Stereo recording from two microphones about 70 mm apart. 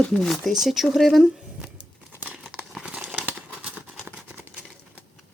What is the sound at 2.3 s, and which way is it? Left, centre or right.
Crumpling, centre.